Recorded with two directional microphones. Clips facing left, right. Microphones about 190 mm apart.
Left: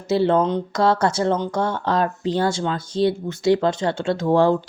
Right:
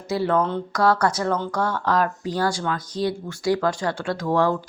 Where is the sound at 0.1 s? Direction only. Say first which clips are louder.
Left 4 dB; 25° left (ahead or behind).